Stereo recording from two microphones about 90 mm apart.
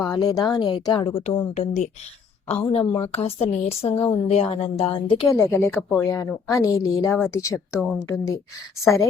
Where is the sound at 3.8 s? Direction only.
85° left; by 5.2 s 70° left (ahead or behind).